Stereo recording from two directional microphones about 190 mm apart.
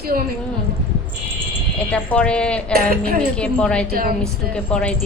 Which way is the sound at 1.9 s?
5° left (ahead or behind).